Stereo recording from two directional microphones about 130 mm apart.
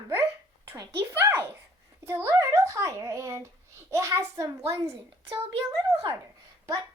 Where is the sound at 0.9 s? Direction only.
15° right (ahead or behind).